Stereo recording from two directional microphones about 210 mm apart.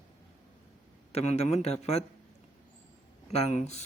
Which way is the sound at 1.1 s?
30° left (ahead or behind).